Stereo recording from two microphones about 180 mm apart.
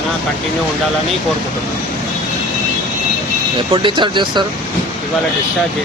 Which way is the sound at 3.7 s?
25° right (ahead or behind).